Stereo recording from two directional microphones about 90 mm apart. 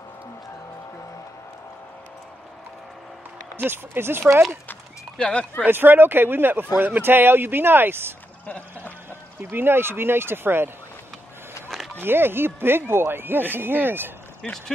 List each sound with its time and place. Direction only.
3.5 s speech: 25° right (ahead or behind)
5.1 s speech: 10° left (ahead or behind)
5.6 s speech: 20° right (ahead or behind)
9.4 s speech: 25° right (ahead or behind)
12.0 s speech: 25° right (ahead or behind)
14.4 s speech: 5° left (ahead or behind)